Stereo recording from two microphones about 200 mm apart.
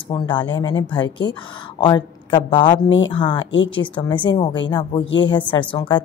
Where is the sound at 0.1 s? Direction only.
25° left (ahead or behind).